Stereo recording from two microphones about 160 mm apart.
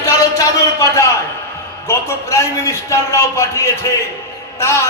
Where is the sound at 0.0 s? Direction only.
20° left (ahead or behind).